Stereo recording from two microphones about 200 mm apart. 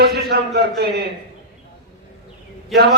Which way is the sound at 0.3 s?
50° right (ahead or behind).